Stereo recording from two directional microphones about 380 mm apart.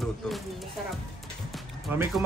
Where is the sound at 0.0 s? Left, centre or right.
Centre.